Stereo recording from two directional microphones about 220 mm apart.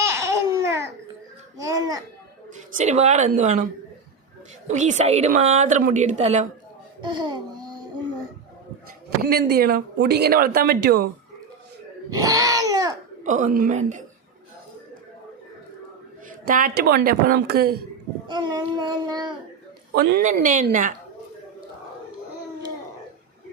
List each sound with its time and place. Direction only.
0.0 s babbling: 10° right (ahead or behind)
1.6 s a child's voice: 15° right (ahead or behind)
2.7 s a woman's voice: 30° right (ahead or behind)
4.7 s a woman's voice: 35° right (ahead or behind)
7.0 s a sound: 20° right (ahead or behind)
9.0 s speech: 45° right (ahead or behind)
12.1 s a sound: 15° right (ahead or behind)
13.2 s a woman's voice: 35° right (ahead or behind)
16.5 s speech: 40° right (ahead or behind)
18.3 s child singing: 20° right (ahead or behind)
19.9 s speech: 45° right (ahead or behind)
20.2 s a woman's voice: 35° right (ahead or behind)